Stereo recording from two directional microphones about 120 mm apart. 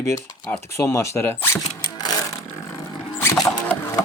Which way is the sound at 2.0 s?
30° left (ahead or behind).